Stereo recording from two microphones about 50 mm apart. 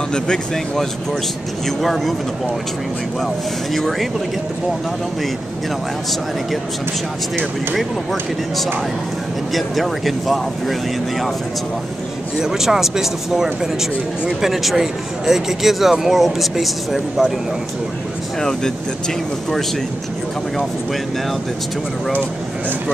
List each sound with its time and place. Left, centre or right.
0.1 s speech: centre
1.8 s speech: centre
3.7 s speech: centre
7.7 s speech: centre
12.4 s speech: centre
18.4 s speech: centre